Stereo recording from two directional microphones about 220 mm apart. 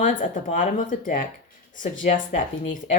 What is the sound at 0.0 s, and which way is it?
Speech, 35° left (ahead or behind).